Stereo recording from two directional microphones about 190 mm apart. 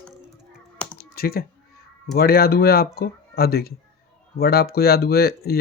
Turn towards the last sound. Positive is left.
turn(degrees=55)  # may be behind; listen again after turning